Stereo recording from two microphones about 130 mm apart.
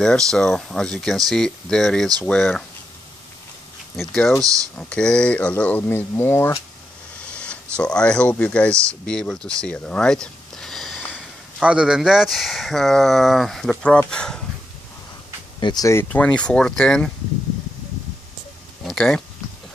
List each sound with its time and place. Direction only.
0.0 s speech: 5° left (ahead or behind)
3.9 s speech: centre (ahead or behind)
4.4 s speech: 25° right (ahead or behind)
4.7 s speech: 5° left (ahead or behind)
9.6 s a sound: 10° left (ahead or behind)
11.1 s speech: 5° right (ahead or behind)
15.6 s speech: 30° left (ahead or behind); by 17.1 s 5° left (ahead or behind)
18.9 s speech: 5° left (ahead or behind)